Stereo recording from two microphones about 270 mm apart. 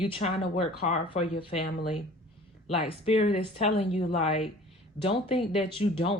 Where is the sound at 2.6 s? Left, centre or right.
Left.